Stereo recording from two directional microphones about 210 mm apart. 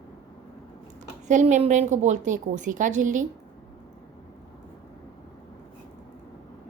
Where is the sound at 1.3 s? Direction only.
35° right (ahead or behind).